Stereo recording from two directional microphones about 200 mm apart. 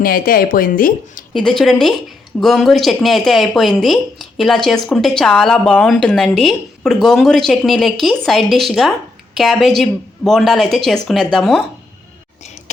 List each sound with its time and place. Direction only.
0.0 s speech: 45° left (ahead or behind)
1.3 s speech: centre (ahead or behind)